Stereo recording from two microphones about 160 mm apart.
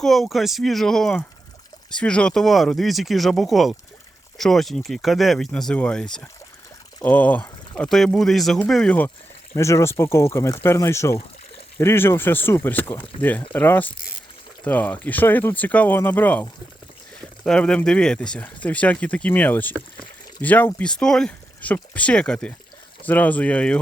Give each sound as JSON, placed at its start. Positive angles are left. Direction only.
{"t": 0.0, "sound": "speech", "side_deg": 0}